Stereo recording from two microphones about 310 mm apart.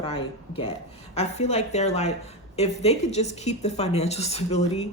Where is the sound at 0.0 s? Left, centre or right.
Centre.